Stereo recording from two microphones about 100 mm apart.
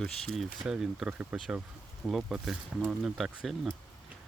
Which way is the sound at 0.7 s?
5° right (ahead or behind).